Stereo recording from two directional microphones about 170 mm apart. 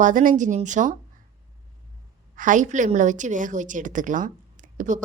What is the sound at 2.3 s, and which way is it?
A woman's voice, 50° right (ahead or behind).